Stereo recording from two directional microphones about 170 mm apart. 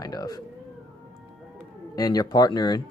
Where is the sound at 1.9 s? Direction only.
20° left (ahead or behind).